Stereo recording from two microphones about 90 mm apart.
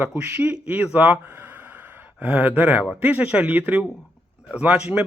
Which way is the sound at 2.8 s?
5° right (ahead or behind).